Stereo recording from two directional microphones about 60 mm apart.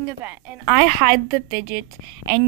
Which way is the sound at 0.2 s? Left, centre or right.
Right.